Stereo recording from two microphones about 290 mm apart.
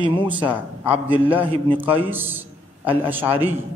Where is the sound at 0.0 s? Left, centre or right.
Centre.